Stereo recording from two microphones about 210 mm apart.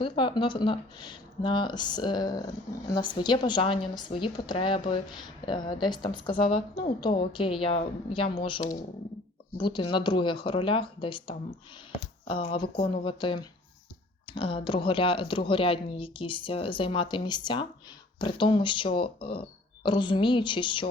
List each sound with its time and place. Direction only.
0.0 s a woman's voice: 25° left (ahead or behind)